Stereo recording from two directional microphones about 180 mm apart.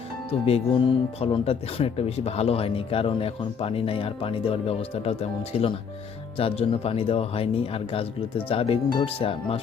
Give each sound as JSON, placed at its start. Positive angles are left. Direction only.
{"t": 0.3, "sound": "speech", "side_deg": 35}